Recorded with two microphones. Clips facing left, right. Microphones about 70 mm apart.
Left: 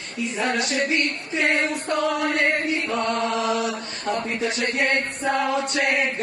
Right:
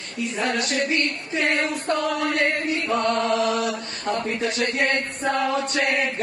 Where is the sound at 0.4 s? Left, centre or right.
Left.